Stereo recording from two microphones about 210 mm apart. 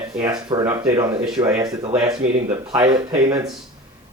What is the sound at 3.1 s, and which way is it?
Speech, 15° right (ahead or behind).